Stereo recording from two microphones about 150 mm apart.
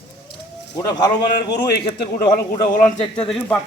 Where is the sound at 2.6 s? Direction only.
60° left (ahead or behind).